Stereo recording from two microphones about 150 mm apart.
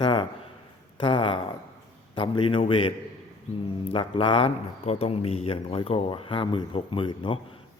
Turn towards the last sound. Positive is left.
turn(degrees=35)  # may be behind; listen again after turning